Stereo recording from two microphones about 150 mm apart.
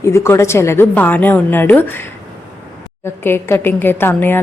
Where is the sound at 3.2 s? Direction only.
15° left (ahead or behind).